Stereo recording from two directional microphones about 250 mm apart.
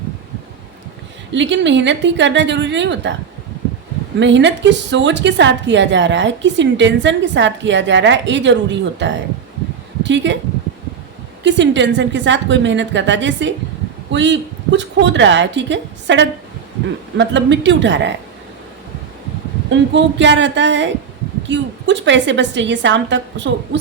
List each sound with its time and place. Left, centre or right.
1.3 s a woman's voice: right
4.2 s a woman's voice: right
11.4 s a woman's voice: right
19.7 s a woman's voice: right